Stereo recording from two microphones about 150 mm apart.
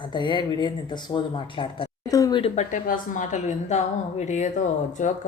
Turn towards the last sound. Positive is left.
turn(degrees=55)  # may be behind; listen again after turning